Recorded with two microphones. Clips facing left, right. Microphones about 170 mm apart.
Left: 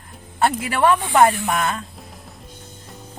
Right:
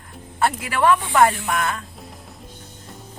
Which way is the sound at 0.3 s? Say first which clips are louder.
Left 2 dB; 25° left (ahead or behind).